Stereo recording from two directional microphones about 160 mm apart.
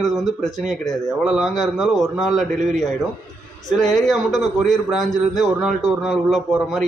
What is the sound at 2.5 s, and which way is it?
Speech, 45° right (ahead or behind).